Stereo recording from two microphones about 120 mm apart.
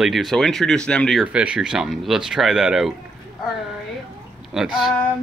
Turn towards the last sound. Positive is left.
turn(degrees=-5)  # may be behind; listen again after turning